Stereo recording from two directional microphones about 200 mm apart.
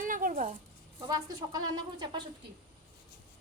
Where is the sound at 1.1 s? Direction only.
20° right (ahead or behind).